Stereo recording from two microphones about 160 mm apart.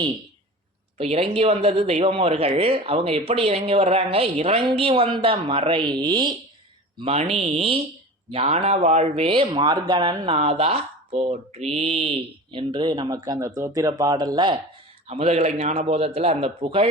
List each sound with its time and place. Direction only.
0.9 s speech: 35° right (ahead or behind)
7.0 s speech: 40° right (ahead or behind)
15.0 s speech: 40° right (ahead or behind)